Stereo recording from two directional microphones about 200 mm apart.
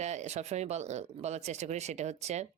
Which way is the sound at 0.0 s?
35° right (ahead or behind).